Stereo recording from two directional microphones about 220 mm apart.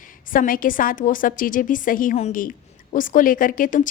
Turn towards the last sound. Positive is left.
turn(degrees=35)  # may be behind; listen again after turning